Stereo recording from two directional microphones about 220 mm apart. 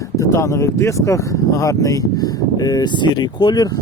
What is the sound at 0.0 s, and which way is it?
Speech, 15° left (ahead or behind).